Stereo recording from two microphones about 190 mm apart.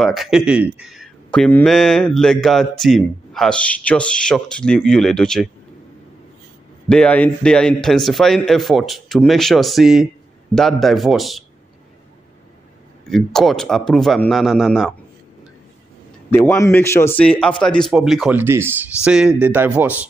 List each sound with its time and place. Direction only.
0.0 s speech: centre (ahead or behind)
6.9 s speech: 5° left (ahead or behind)
13.0 s speech: centre (ahead or behind)
16.3 s speech: 10° left (ahead or behind); by 20.0 s 10° right (ahead or behind)